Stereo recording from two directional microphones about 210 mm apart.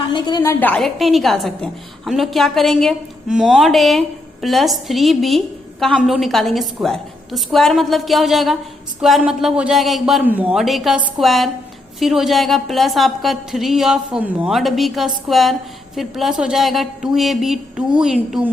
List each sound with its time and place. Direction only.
0.1 s a woman's voice: 20° left (ahead or behind)
0.6 s a woman's voice: 5° left (ahead or behind)